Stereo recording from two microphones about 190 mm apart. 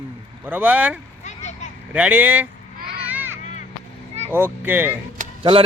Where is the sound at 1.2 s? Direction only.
40° left (ahead or behind).